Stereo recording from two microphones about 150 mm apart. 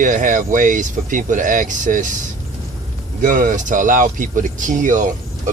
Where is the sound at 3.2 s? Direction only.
60° right (ahead or behind).